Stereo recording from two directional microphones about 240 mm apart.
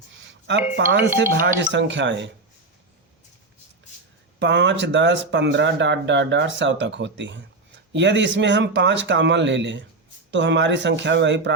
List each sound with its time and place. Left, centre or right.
0.3 s a sound: right
0.9 s speech: right
4.4 s speech: right